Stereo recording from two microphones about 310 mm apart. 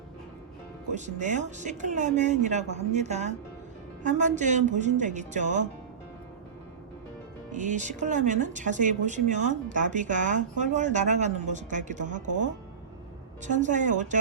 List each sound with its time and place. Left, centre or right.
0.9 s speech: right
7.5 s speech: right